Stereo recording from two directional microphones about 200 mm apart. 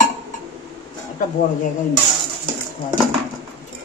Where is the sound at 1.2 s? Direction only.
40° left (ahead or behind).